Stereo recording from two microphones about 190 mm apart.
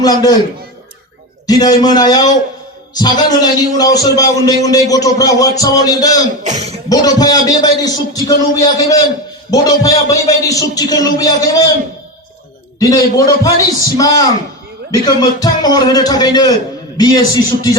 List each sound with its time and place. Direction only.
0.0 s a man's voice: 20° left (ahead or behind)
1.5 s a man's voice: 20° left (ahead or behind)
6.4 s speech: 35° right (ahead or behind)
6.8 s a man's voice: 20° left (ahead or behind)
12.8 s a man's voice: 15° left (ahead or behind)